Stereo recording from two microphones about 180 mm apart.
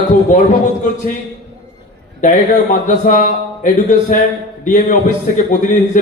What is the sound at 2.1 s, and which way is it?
A man's voice, 45° left (ahead or behind).